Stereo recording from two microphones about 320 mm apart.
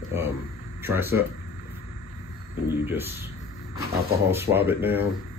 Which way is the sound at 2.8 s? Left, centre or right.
Centre.